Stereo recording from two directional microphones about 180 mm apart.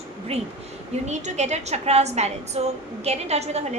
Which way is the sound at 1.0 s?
40° right (ahead or behind).